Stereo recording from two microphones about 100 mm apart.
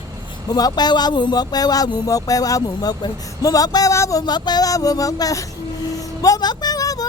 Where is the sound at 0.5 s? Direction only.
40° left (ahead or behind).